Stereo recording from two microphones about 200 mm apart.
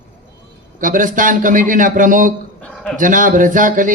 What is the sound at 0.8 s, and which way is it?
A man's voice, 40° right (ahead or behind).